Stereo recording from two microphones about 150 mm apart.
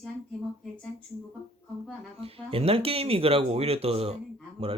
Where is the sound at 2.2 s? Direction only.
40° right (ahead or behind).